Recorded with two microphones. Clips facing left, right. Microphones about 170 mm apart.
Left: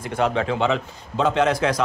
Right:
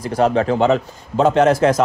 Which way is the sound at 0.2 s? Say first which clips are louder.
Right 6 dB; 40° right (ahead or behind).